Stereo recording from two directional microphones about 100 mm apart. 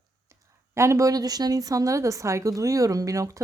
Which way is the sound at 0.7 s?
30° right (ahead or behind).